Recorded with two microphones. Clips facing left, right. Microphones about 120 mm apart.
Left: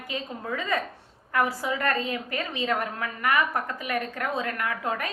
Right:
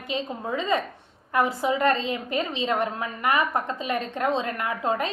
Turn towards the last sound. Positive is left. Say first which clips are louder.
# right 3 dB
turn(degrees=-25)  # may be behind; listen again after turning